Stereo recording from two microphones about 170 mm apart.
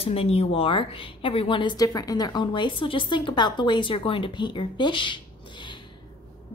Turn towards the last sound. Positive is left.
turn(degrees=30)  # may be behind; listen again after turning